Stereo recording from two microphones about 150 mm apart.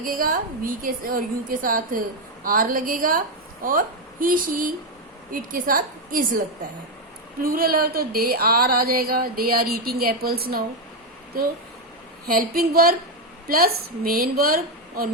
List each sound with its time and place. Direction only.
0.0 s a woman's voice: 70° right (ahead or behind)
7.4 s a sound: 75° right (ahead or behind)
12.3 s a woman's voice: 75° right (ahead or behind)